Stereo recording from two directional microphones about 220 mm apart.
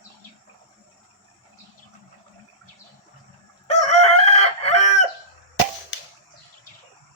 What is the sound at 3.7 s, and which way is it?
Chicken, 30° left (ahead or behind).